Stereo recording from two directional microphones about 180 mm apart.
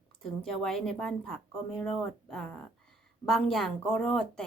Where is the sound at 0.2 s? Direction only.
5° left (ahead or behind).